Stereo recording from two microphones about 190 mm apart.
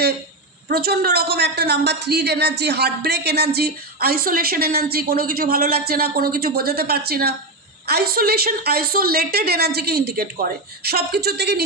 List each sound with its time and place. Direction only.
0.7 s a woman's voice: 55° right (ahead or behind)